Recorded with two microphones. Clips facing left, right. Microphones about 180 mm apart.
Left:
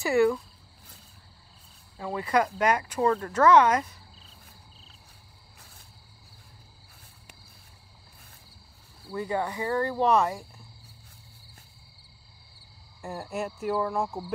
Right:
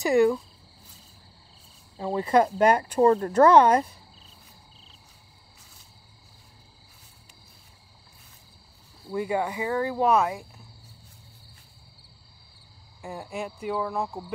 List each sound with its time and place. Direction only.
0.0 s speech: 15° right (ahead or behind)
2.0 s speech: 25° right (ahead or behind)
9.1 s speech: 10° right (ahead or behind)
13.0 s speech: centre (ahead or behind)